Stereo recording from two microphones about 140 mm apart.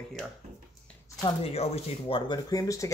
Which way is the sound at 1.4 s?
45° left (ahead or behind).